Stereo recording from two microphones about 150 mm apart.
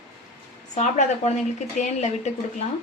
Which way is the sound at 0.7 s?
50° left (ahead or behind).